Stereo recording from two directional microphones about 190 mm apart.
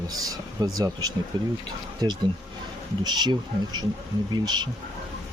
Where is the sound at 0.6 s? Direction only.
20° right (ahead or behind).